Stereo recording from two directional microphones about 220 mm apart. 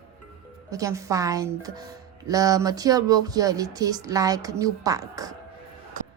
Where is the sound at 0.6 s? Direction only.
15° right (ahead or behind).